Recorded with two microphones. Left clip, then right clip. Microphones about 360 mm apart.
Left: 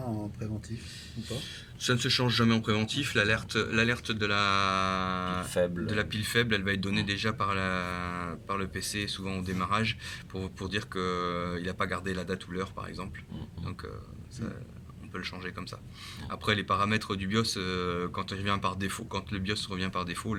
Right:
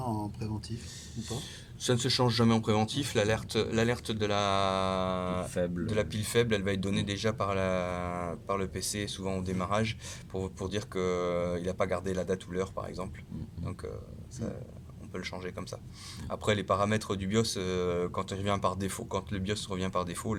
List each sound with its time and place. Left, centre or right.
0.0 s a sound: centre
1.1 s speech: centre
15.1 s speech: centre